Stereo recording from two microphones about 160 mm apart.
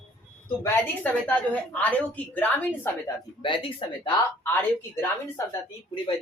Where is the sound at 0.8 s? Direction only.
10° left (ahead or behind).